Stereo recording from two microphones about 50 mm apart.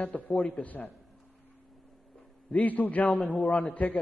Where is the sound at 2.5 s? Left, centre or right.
Left.